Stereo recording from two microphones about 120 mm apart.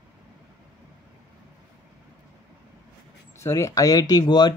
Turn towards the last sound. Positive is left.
turn(degrees=35)  # may be behind; listen again after turning